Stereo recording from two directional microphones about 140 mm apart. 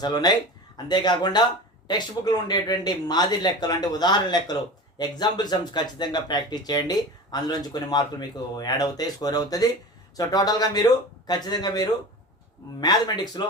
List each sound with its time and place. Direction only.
0.0 s speech: 30° left (ahead or behind)